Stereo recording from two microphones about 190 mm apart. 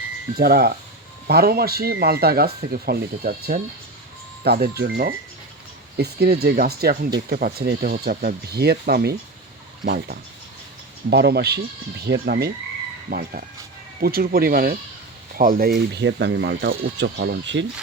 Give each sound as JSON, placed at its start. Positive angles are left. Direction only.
{"t": 0.3, "sound": "speech", "side_deg": -55}